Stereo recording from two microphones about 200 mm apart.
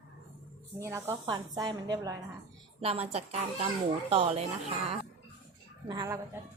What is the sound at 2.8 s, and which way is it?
A child's voice, 30° right (ahead or behind).